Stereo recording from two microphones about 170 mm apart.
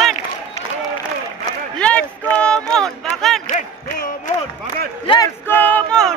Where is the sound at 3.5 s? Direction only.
45° left (ahead or behind).